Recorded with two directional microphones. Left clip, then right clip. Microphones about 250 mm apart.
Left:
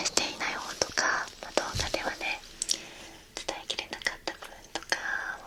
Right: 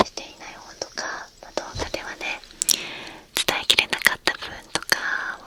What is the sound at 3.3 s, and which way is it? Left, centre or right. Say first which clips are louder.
Whispering: right 15 dB; right.